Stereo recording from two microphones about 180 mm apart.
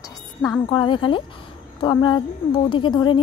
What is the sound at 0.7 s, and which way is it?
A woman's voice, 25° left (ahead or behind).